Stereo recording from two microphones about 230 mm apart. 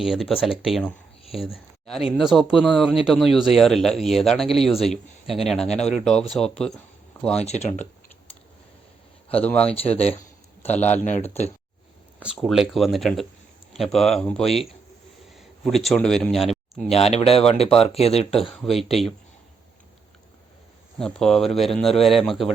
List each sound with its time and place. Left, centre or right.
0.0 s speech: centre
7.4 s speech: left
9.4 s speech: centre
11.0 s speech: left
12.2 s speech: centre
16.9 s speech: left
18.5 s speech: centre
21.0 s speech: centre